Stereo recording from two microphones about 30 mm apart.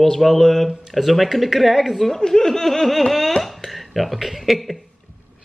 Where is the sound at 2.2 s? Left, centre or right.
Centre.